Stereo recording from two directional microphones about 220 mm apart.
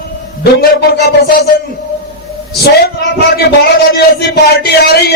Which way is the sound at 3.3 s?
45° left (ahead or behind).